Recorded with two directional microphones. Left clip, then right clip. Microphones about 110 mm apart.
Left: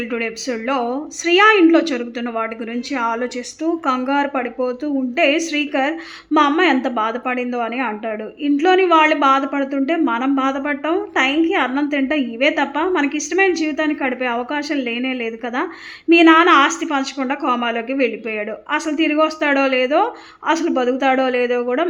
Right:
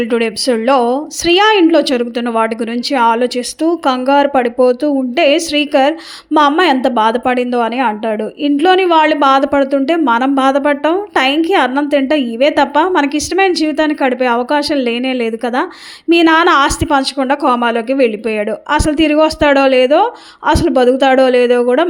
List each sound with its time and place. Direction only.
0.0 s a woman's voice: 55° right (ahead or behind)
2.9 s a woman's voice: 50° right (ahead or behind)